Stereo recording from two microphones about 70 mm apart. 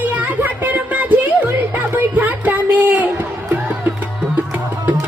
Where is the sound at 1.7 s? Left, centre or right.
Right.